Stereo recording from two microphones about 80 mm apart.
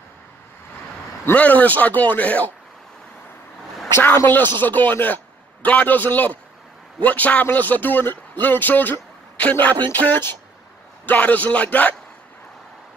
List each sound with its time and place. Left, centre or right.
1.3 s a man's voice: centre
3.9 s a man's voice: left